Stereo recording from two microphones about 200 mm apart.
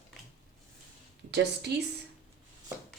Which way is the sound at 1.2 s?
60° right (ahead or behind).